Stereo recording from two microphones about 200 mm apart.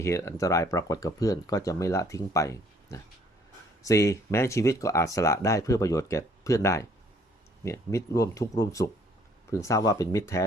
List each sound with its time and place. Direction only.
0.0 s speech: 15° left (ahead or behind)